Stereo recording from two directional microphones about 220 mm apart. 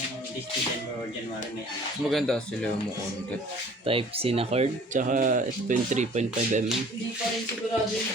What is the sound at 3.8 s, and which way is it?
Speech, 25° right (ahead or behind).